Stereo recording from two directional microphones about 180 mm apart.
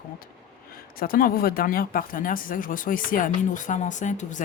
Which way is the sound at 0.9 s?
55° left (ahead or behind).